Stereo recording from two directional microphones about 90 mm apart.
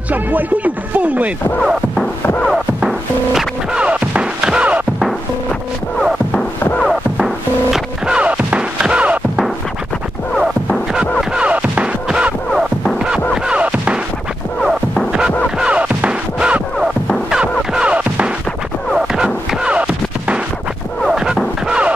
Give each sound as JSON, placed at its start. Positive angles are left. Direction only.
{"t": 0.1, "sound": "speech", "side_deg": -20}
{"t": 2.4, "sound": "music", "side_deg": 0}
{"t": 5.0, "sound": "music", "side_deg": 0}
{"t": 10.9, "sound": "music", "side_deg": -5}
{"t": 15.6, "sound": "music", "side_deg": -15}